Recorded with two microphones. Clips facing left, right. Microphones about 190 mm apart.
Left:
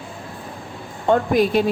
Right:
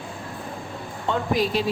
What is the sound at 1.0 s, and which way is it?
Speech, 55° left (ahead or behind).